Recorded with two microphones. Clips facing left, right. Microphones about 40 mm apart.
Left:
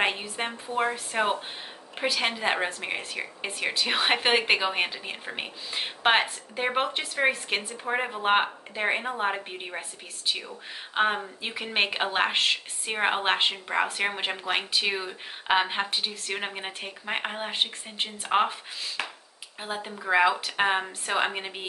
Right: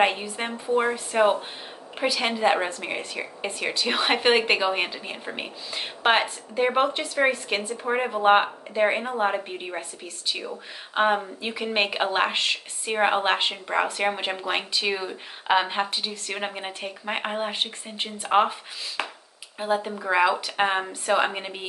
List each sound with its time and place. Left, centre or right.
0.0 s speech: centre
19.0 s speech: centre
19.6 s speech: centre